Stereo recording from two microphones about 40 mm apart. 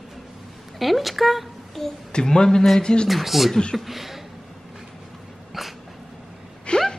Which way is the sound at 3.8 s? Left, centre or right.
Centre.